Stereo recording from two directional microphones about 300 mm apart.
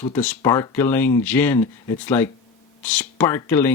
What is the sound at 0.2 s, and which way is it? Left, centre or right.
Speech, centre.